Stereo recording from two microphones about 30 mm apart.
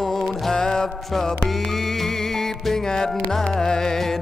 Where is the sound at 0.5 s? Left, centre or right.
Left.